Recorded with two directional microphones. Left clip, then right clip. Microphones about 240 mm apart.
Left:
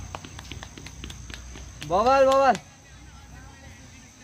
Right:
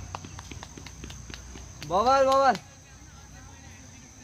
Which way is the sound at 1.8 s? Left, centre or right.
Left.